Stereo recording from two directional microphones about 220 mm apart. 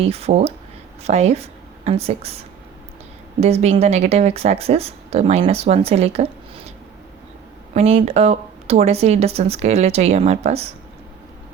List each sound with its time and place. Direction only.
0.0 s speech: 25° right (ahead or behind)
3.4 s speech: 30° right (ahead or behind)
7.7 s speech: 30° right (ahead or behind)